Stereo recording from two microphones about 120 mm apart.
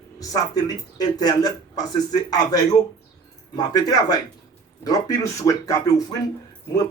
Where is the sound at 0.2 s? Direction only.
30° left (ahead or behind).